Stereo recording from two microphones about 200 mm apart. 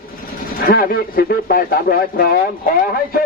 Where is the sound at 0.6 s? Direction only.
45° left (ahead or behind).